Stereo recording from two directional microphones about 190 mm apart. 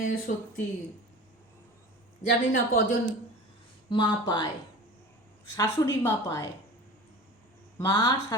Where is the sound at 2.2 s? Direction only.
45° left (ahead or behind).